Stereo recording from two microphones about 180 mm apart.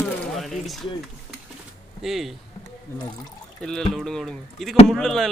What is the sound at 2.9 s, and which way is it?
Speech, 15° left (ahead or behind).